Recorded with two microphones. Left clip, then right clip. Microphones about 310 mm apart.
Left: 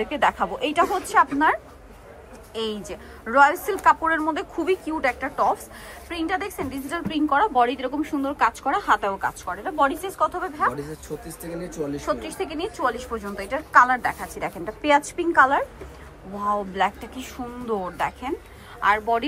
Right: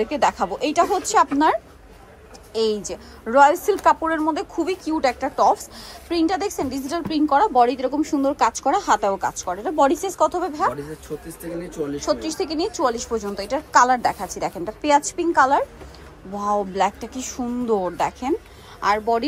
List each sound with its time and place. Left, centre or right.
0.0 s a woman's voice: centre
2.8 s a woman's voice: centre
10.7 s speech: centre
12.2 s a woman's voice: right
13.2 s a woman's voice: centre